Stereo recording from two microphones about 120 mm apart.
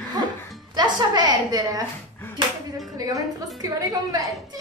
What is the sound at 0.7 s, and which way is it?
A woman's voice, 35° right (ahead or behind).